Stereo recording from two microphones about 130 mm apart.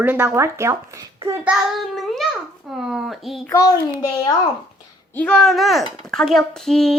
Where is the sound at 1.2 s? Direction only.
30° right (ahead or behind).